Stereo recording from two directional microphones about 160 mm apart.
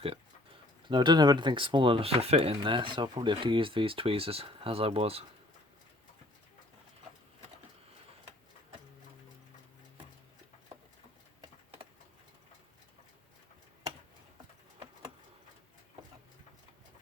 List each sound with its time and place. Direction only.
0.0 s speech: 35° right (ahead or behind)